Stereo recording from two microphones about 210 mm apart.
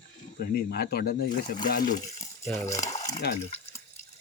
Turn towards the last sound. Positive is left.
turn(degrees=55)  # may be behind; listen again after turning